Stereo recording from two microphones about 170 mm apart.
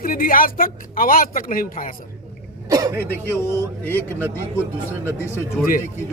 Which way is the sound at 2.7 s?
20° right (ahead or behind).